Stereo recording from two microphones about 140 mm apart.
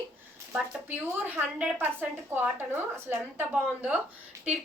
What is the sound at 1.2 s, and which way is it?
A woman's voice, 10° right (ahead or behind).